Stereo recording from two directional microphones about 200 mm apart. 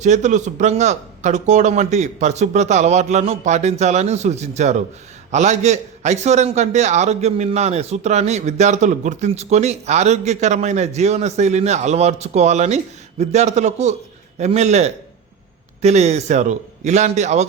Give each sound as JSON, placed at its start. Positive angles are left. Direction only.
{"t": 0.0, "sound": "a man's voice", "side_deg": -35}